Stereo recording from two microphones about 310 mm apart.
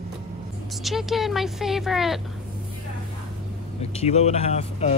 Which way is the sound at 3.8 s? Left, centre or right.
Centre.